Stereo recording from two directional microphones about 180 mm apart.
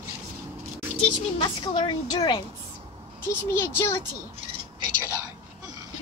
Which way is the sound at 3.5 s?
10° left (ahead or behind).